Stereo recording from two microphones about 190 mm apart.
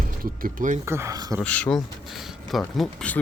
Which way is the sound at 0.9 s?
15° right (ahead or behind).